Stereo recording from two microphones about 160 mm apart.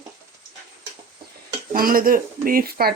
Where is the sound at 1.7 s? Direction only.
60° right (ahead or behind).